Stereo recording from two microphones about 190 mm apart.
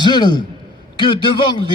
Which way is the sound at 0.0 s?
25° left (ahead or behind).